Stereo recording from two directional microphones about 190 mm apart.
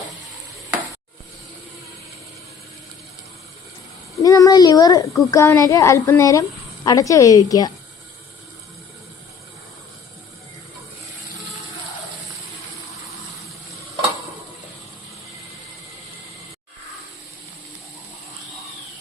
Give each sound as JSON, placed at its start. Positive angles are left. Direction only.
{"t": 4.2, "sound": "a child's voice", "side_deg": 20}